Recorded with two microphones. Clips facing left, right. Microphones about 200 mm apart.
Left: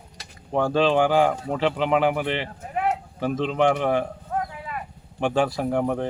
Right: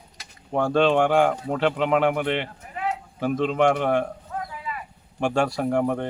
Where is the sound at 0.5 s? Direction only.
Centre (ahead or behind).